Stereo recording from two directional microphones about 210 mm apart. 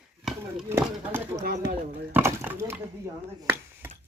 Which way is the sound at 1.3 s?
45° right (ahead or behind).